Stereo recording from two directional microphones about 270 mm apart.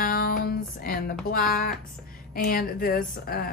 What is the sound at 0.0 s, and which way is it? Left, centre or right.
Music, left.